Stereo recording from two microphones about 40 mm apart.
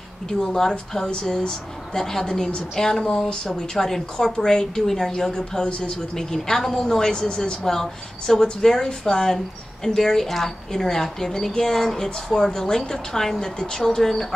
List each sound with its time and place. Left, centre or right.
0.3 s a woman's voice: centre
5.7 s speech: left
6.1 s a woman's voice: centre
7.6 s a woman's voice: centre
12.4 s a woman's voice: centre